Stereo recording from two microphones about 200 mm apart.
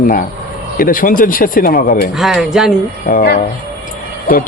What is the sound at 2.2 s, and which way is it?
Speech, centre (ahead or behind).